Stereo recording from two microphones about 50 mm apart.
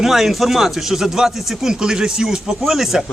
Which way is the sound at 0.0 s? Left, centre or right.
Centre.